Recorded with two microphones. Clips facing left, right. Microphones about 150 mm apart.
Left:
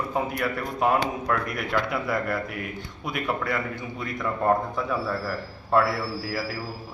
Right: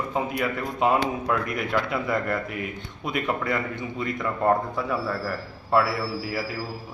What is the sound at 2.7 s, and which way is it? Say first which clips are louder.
A man's voice: right 2 dB; 20° right (ahead or behind).